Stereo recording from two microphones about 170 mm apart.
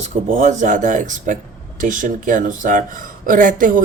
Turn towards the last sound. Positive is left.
turn(degrees=-50)  # may be behind; listen again after turning